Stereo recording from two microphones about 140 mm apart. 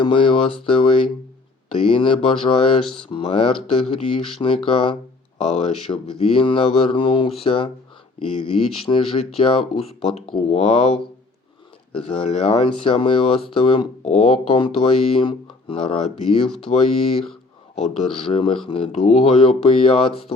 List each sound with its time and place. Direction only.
0.0 s speech: 40° left (ahead or behind)
11.9 s speech: 40° left (ahead or behind)